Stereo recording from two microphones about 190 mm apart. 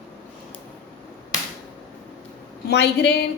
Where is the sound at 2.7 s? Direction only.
60° left (ahead or behind).